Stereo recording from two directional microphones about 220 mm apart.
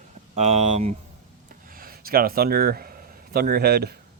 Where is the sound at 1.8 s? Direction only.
40° right (ahead or behind).